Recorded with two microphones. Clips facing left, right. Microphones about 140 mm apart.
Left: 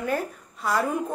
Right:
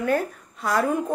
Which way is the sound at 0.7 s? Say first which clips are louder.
Right 2 dB; 45° right (ahead or behind).